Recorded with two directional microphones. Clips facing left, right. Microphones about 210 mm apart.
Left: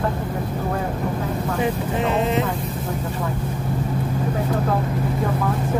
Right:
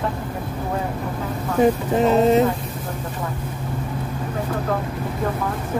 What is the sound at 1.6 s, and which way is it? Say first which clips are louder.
Speech: right 8 dB; 40° right (ahead or behind).